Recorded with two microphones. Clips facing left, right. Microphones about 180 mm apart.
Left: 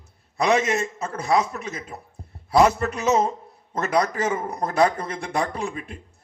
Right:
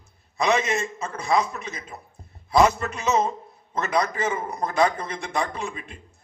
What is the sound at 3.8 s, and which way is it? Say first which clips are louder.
Speech: left 2 dB; 45° left (ahead or behind).